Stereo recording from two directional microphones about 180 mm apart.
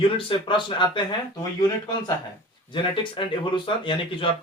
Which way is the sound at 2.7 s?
25° left (ahead or behind).